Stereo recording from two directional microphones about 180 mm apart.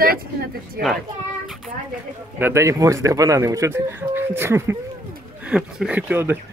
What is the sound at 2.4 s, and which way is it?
Speech, 15° right (ahead or behind).